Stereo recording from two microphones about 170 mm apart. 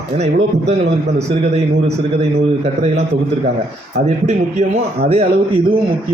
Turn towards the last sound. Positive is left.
turn(degrees=-35)  # may be behind; listen again after turning